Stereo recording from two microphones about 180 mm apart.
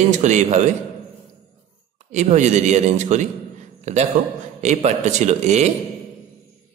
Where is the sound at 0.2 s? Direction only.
40° right (ahead or behind).